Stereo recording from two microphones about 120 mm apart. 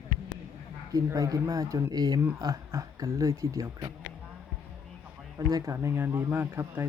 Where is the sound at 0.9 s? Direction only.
30° right (ahead or behind).